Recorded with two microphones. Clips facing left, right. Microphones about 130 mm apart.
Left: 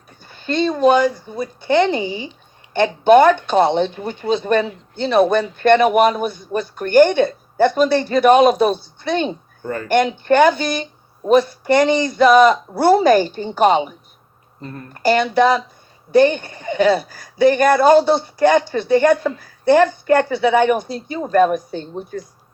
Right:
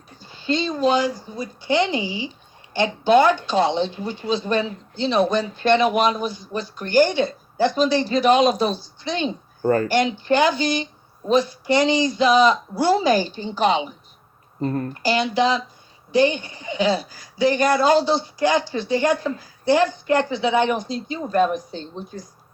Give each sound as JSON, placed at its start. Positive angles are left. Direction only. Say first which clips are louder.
{"t": 0.2, "sound": "speech", "louder": "left 4 dB", "side_deg": 55}
{"t": 9.6, "sound": "speech", "louder": "right 7 dB", "side_deg": -35}
{"t": 9.9, "sound": "speech", "louder": "left 4 dB", "side_deg": 55}
{"t": 14.6, "sound": "speech", "louder": "right 10 dB", "side_deg": -40}
{"t": 14.9, "sound": "speech", "louder": "left 8 dB", "side_deg": 50}